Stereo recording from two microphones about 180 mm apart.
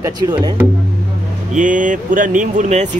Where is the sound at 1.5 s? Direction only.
45° right (ahead or behind).